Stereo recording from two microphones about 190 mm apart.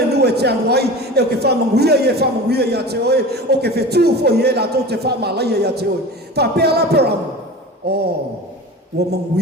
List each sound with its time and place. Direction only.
0.1 s a man's voice: 60° right (ahead or behind)